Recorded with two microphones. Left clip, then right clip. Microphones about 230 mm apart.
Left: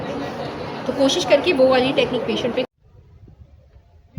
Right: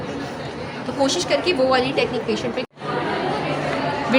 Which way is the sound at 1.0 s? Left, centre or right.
Right.